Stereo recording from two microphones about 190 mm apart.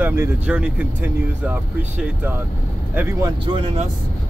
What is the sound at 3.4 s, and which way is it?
Speech, 30° right (ahead or behind).